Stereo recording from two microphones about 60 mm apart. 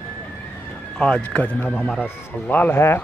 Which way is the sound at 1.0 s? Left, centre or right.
Centre.